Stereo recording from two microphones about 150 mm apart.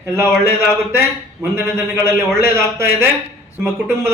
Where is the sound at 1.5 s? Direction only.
15° right (ahead or behind).